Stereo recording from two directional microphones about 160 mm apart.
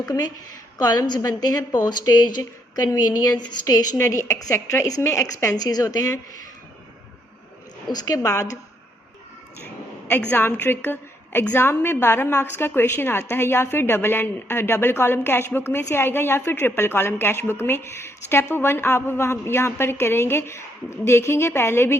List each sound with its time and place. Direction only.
0.8 s a woman's voice: 25° left (ahead or behind)
7.9 s a woman's voice: 20° left (ahead or behind)
10.1 s a woman's voice: 10° left (ahead or behind)